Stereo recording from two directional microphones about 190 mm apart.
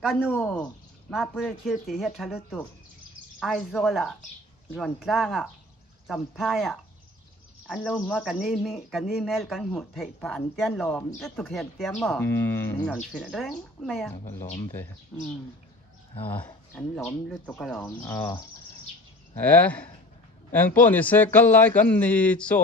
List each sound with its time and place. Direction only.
0.3 s speech: 5° left (ahead or behind)
14.4 s speech: 35° left (ahead or behind)
15.1 s speech: 5° left (ahead or behind)
18.2 s speech: 20° left (ahead or behind)
19.4 s speech: 10° left (ahead or behind)